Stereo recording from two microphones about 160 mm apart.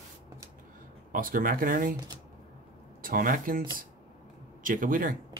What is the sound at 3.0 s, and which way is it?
Speech, 60° right (ahead or behind).